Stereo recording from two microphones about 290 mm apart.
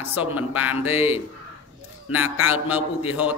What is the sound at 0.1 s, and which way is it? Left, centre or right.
Speech, centre.